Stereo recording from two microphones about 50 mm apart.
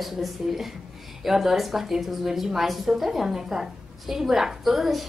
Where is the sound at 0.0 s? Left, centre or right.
Centre.